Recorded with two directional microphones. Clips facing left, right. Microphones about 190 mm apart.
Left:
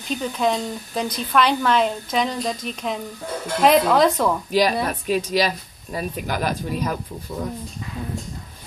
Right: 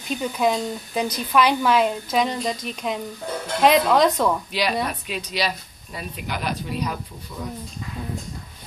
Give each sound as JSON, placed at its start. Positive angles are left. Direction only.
{"t": 0.2, "sound": "speech", "side_deg": -5}
{"t": 4.5, "sound": "speech", "side_deg": 45}